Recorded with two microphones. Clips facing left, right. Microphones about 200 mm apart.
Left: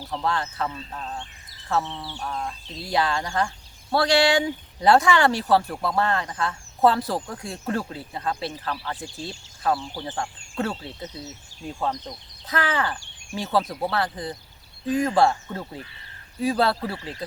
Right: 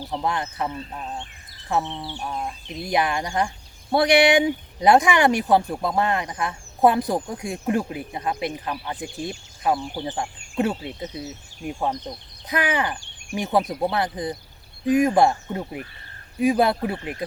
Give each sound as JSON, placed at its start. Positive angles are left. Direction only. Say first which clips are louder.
{"t": 0.0, "sound": "speech", "louder": "right 1 dB", "side_deg": -15}